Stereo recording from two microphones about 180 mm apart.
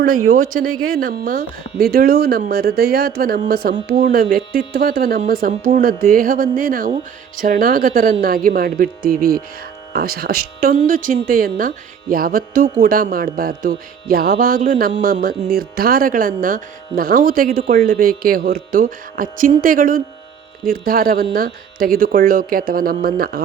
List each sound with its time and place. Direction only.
0.0 s speech: 50° right (ahead or behind)
2.5 s music: 60° right (ahead or behind)
8.4 s speech: 55° right (ahead or behind)
10.8 s music: 50° right (ahead or behind)
21.3 s speech: 55° right (ahead or behind)